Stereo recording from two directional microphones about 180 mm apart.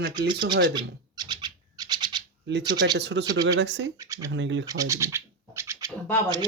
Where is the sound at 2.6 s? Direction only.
20° right (ahead or behind).